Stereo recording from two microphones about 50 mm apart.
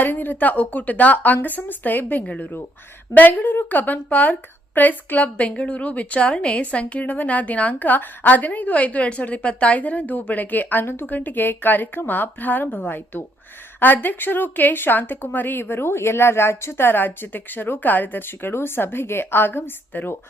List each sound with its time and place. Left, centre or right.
0.0 s a woman's voice: left
2.4 s a woman's voice: left